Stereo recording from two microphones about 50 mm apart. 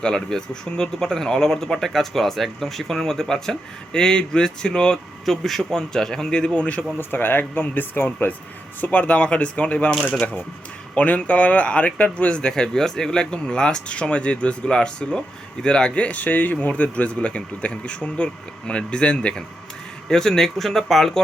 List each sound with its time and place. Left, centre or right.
0.0 s speech: centre
5.2 s speech: centre; by 6.8 s left
7.0 s speech: left
8.8 s speech: left
10.0 s speech: centre
10.9 s speech: left; by 21.2 s centre